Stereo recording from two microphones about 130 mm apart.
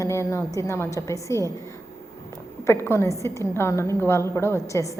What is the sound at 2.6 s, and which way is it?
A woman's voice, 20° left (ahead or behind).